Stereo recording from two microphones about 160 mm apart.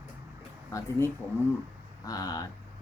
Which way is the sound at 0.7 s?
15° left (ahead or behind).